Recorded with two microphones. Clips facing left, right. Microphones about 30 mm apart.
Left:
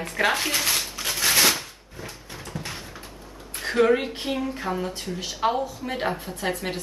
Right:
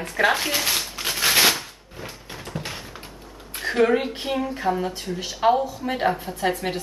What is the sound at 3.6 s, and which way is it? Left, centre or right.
A woman's voice, centre.